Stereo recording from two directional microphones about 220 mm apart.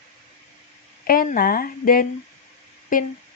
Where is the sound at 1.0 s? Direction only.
40° left (ahead or behind).